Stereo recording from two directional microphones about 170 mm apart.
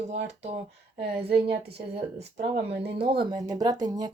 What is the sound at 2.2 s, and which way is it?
Speech, 80° right.